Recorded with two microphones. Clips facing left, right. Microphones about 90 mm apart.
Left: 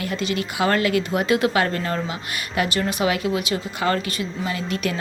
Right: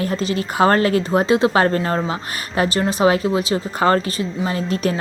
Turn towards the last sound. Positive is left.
turn(degrees=-35)  # may be behind; listen again after turning